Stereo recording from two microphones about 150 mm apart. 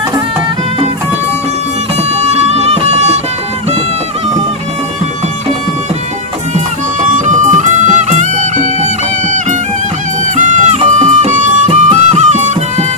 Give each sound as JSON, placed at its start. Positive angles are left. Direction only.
{"t": 2.1, "sound": "music", "side_deg": -45}
{"t": 7.2, "sound": "music", "side_deg": -55}
{"t": 10.3, "sound": "music", "side_deg": -50}